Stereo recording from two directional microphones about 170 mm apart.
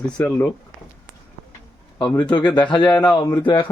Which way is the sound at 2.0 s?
25° left (ahead or behind).